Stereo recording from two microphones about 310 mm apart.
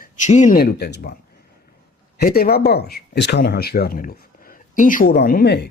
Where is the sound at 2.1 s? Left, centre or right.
Left.